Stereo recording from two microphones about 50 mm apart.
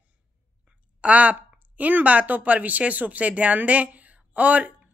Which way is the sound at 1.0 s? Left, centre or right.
Right.